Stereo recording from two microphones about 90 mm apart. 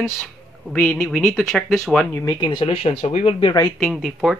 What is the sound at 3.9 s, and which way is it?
Speech, 5° right (ahead or behind).